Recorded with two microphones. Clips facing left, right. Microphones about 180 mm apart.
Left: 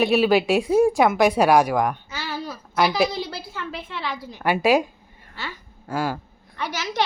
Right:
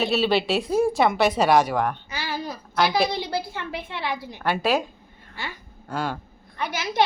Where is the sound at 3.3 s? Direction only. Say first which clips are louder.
Right 4 dB; 15° right (ahead or behind).